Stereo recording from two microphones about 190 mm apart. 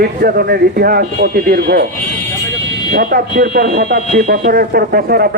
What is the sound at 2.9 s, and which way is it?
Speech, 50° right (ahead or behind).